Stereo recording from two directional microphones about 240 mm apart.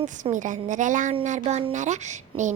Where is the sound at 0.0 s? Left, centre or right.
Right.